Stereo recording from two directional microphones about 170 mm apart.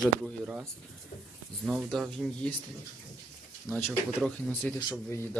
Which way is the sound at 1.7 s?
5° right (ahead or behind).